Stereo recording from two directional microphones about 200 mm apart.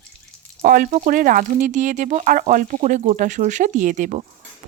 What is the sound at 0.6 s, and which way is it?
Speech, 45° right (ahead or behind).